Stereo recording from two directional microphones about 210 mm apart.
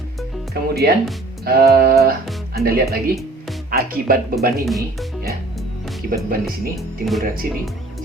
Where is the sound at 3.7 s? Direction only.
45° right (ahead or behind).